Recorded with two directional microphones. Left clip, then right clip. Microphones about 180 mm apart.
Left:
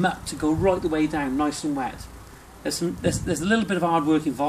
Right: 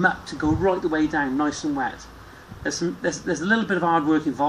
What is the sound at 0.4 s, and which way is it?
Speech, 15° left (ahead or behind).